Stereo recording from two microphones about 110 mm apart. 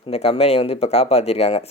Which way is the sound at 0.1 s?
70° left (ahead or behind).